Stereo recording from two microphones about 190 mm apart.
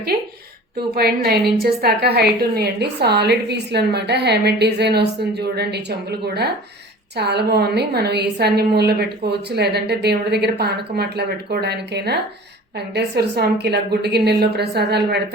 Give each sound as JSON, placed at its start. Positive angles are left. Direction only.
{"t": 0.9, "sound": "a woman's voice", "side_deg": -55}